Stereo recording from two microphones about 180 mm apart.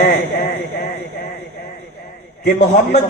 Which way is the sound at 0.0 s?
55° left (ahead or behind).